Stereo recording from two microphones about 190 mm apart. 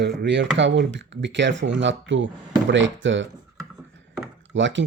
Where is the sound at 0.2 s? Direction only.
70° right (ahead or behind).